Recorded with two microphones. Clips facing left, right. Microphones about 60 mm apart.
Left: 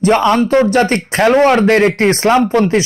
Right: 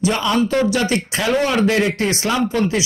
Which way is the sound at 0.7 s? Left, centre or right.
Left.